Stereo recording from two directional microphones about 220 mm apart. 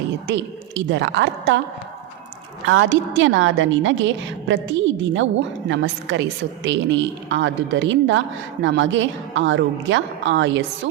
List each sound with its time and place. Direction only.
0.3 s a woman's voice: 55° right (ahead or behind)
2.6 s a woman's voice: 60° right (ahead or behind)